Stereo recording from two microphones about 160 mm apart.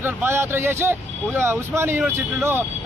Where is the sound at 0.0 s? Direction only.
15° right (ahead or behind).